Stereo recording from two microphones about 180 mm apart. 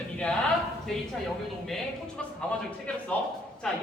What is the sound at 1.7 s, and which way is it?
Speech, 5° left (ahead or behind).